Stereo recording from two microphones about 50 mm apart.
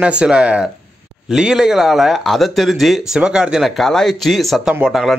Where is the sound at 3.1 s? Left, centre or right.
Centre.